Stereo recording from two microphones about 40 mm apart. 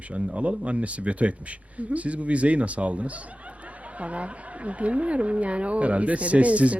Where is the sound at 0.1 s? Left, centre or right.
Right.